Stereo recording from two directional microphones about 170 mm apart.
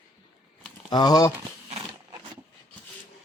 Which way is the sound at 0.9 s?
25° left (ahead or behind).